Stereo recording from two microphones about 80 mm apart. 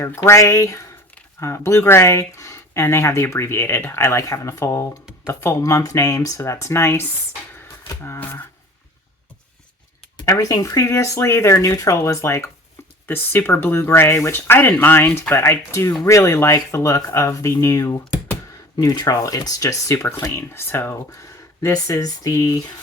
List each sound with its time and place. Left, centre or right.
0.2 s speech: left
10.2 s speech: left
18.8 s speech: left
21.1 s speech: left